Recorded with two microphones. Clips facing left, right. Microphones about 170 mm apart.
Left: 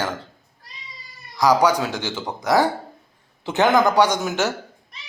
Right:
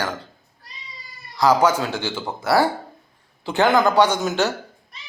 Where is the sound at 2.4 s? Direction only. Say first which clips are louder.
Even; 15° left (ahead or behind).